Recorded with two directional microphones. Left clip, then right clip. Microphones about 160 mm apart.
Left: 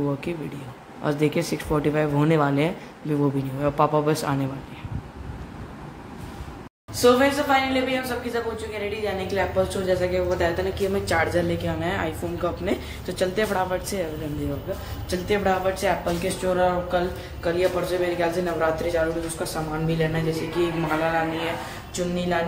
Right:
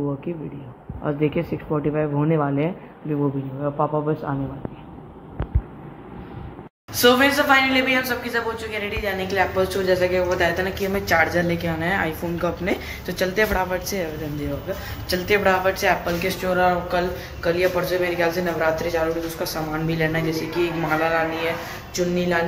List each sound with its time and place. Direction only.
0.0 s speech: 20° left (ahead or behind)
3.6 s a man's voice: 35° left (ahead or behind)
7.0 s speech: centre (ahead or behind)
15.0 s speech: 5° left (ahead or behind)